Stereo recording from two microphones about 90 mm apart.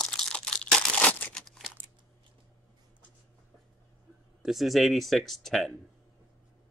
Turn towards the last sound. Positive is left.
turn(degrees=0)  # may be behind; listen again after turning